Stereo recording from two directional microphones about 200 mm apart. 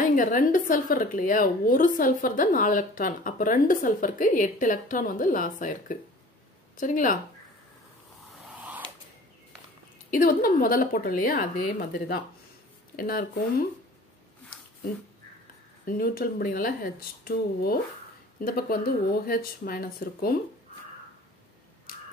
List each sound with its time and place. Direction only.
0.1 s a woman's voice: 40° left (ahead or behind)
8.5 s a sound: 10° right (ahead or behind)
10.1 s a woman's voice: 45° left (ahead or behind)
15.8 s a woman's voice: 45° left (ahead or behind)